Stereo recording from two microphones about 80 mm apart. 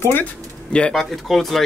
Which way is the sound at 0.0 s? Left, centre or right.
Left.